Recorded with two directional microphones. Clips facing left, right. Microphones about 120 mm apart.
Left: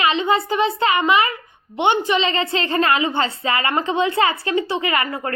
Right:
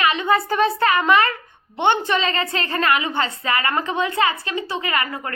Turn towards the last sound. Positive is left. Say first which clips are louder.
# left 3 dB
turn(degrees=25)  # may be behind; listen again after turning